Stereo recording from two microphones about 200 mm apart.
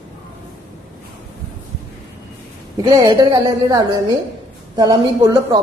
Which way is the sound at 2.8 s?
20° right (ahead or behind).